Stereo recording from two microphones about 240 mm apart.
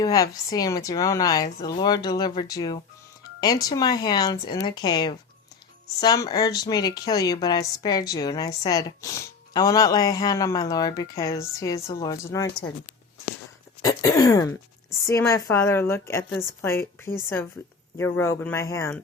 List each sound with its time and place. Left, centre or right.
0.0 s speech: centre
13.8 s speech: centre